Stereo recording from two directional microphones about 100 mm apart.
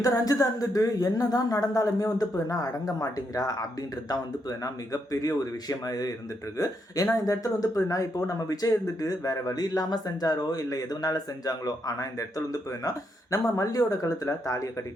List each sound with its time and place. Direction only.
0.0 s speech: 35° left (ahead or behind)